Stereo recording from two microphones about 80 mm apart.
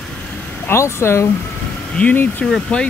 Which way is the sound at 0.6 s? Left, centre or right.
Left.